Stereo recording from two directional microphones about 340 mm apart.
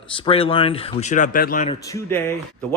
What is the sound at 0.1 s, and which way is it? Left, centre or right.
Speech, centre.